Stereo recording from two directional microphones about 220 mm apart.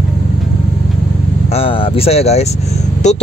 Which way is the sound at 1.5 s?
25° left (ahead or behind).